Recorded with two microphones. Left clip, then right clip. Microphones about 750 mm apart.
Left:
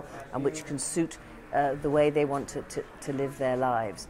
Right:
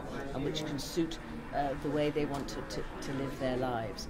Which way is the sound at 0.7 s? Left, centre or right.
Left.